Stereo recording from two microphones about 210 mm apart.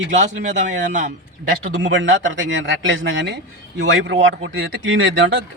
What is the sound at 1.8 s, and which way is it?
Speech, 60° right (ahead or behind).